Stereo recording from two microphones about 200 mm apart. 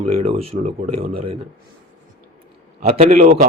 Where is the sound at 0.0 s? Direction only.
35° right (ahead or behind).